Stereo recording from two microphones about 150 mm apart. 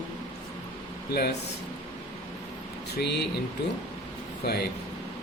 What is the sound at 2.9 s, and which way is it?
Speech, 90° left.